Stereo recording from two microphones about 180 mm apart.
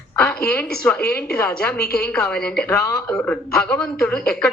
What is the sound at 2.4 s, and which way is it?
Speech, 60° left (ahead or behind).